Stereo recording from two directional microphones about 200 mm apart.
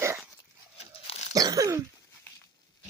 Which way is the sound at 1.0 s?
35° left (ahead or behind).